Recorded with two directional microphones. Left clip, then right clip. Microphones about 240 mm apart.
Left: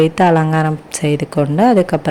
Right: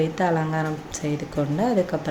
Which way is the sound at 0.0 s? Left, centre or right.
Left.